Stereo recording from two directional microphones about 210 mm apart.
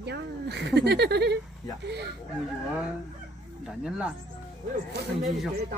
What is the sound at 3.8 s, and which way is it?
Speech, 5° right (ahead or behind).